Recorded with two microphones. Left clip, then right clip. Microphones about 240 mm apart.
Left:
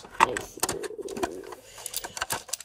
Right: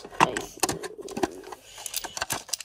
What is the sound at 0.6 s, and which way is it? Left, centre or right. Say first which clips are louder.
Bird: right 2 dB; centre.